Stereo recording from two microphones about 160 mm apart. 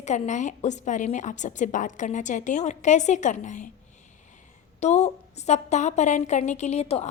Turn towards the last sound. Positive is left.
turn(degrees=40)  # may be behind; listen again after turning